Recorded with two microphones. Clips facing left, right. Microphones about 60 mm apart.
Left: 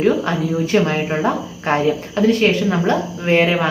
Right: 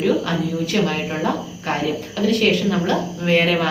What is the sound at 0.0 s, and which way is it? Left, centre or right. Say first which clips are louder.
Speech: left 3 dB; left.